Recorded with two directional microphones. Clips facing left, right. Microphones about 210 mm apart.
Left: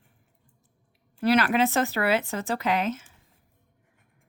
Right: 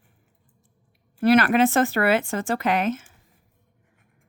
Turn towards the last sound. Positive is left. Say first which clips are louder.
# right 3 dB
turn(degrees=-50)  # may be behind; listen again after turning